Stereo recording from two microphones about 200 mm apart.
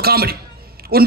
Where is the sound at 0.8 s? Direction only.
50° right (ahead or behind).